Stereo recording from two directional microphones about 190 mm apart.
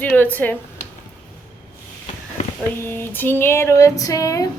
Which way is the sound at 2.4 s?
40° left (ahead or behind).